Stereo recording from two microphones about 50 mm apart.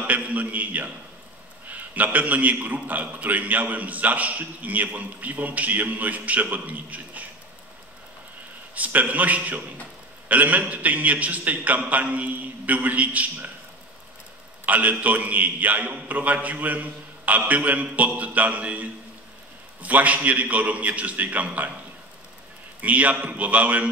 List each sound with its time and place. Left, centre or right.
0.0 s a man's voice: right
8.7 s a man's voice: right
14.7 s a man's voice: right
22.8 s a man's voice: right